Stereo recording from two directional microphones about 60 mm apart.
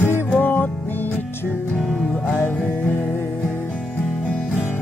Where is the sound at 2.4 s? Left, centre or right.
Left.